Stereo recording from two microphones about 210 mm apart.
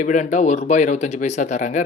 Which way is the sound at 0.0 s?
35° left (ahead or behind).